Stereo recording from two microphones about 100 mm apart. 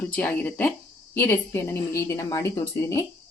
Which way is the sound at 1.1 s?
25° left (ahead or behind).